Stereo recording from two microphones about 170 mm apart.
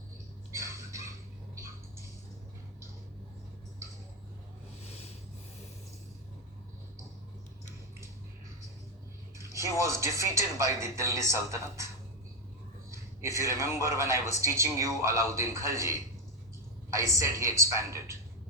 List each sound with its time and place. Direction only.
0.5 s a sound: 15° right (ahead or behind)
9.4 s speech: 15° right (ahead or behind)
12.9 s speech: 15° right (ahead or behind)